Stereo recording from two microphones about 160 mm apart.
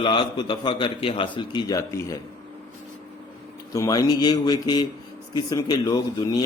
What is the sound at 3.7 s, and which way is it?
A man's voice, 20° left (ahead or behind).